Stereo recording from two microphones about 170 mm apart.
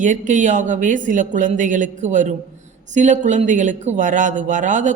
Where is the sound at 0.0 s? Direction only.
50° right (ahead or behind).